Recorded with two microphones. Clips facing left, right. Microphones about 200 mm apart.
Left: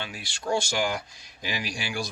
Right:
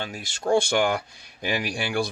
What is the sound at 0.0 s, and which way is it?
Speech, 45° right (ahead or behind).